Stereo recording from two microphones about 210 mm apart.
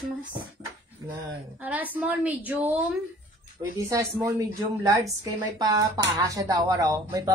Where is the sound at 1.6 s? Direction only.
10° right (ahead or behind).